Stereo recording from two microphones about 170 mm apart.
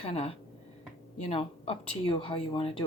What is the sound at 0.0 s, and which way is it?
Speech, 35° left (ahead or behind).